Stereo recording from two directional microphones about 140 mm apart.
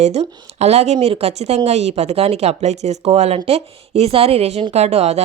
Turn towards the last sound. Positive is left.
turn(degrees=-50)  # may be behind; listen again after turning